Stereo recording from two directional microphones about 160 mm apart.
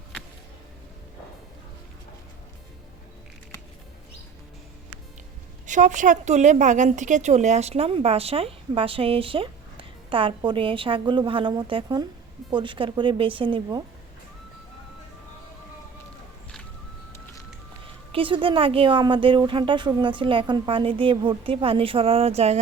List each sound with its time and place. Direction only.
5.6 s a woman's voice: 50° right (ahead or behind); by 13.8 s 30° right (ahead or behind)
18.1 s a woman's voice: 35° right (ahead or behind)